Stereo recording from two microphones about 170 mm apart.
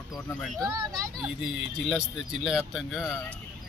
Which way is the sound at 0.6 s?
20° right (ahead or behind).